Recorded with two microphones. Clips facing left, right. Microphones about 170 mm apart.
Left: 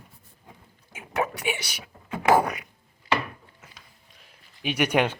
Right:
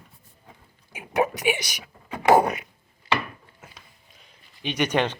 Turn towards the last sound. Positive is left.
turn(degrees=10)  # may be behind; listen again after turning